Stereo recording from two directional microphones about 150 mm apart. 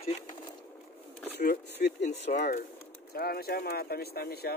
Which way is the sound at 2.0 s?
50° left (ahead or behind).